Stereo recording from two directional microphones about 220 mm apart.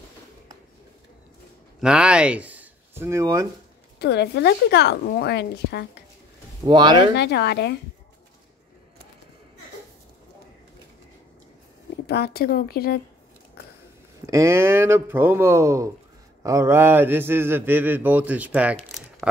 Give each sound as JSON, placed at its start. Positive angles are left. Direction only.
{"t": 1.8, "sound": "speech", "side_deg": -5}
{"t": 4.0, "sound": "a woman's voice", "side_deg": 50}
{"t": 6.6, "sound": "speech", "side_deg": -20}
{"t": 7.2, "sound": "a woman's voice", "side_deg": 50}
{"t": 12.1, "sound": "a woman's voice", "side_deg": 45}
{"t": 14.2, "sound": "a man's voice", "side_deg": -15}
{"t": 18.8, "sound": "a sound", "side_deg": 0}